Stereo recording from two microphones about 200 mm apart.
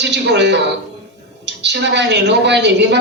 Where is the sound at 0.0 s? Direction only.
60° right (ahead or behind).